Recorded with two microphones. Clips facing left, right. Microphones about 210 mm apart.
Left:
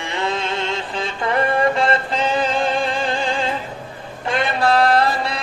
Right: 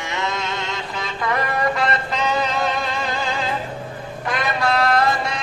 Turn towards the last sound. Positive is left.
turn(degrees=35)  # may be behind; listen again after turning